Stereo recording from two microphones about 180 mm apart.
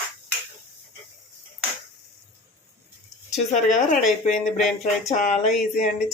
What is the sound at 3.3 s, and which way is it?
Speech, 40° left (ahead or behind).